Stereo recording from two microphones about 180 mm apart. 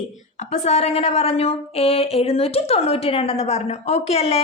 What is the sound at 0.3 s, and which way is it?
A woman's voice, 40° left (ahead or behind).